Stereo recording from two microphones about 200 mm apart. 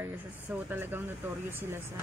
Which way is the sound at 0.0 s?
10° right (ahead or behind).